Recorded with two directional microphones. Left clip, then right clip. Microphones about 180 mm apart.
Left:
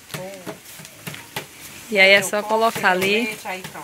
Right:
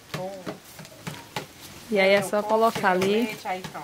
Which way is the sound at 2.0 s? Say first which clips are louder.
Left 6 dB; 10° right (ahead or behind).